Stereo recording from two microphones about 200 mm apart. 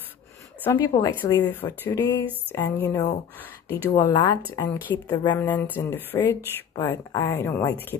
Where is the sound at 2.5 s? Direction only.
10° left (ahead or behind).